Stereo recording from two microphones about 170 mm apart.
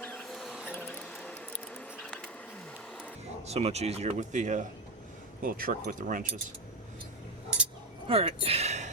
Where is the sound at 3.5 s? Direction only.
40° right (ahead or behind).